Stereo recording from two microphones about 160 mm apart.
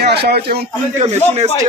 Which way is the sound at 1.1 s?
45° right (ahead or behind).